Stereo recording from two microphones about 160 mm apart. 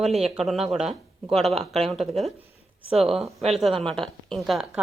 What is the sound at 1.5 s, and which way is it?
Speech, 40° right (ahead or behind).